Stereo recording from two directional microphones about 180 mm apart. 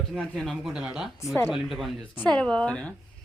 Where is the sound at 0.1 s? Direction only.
Centre (ahead or behind).